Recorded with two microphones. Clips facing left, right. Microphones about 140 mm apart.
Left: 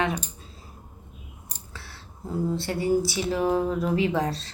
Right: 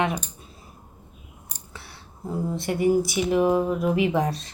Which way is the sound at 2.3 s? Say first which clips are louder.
Even; 20° right (ahead or behind).